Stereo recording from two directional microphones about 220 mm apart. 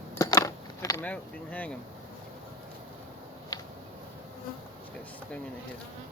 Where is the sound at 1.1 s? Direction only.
5° left (ahead or behind).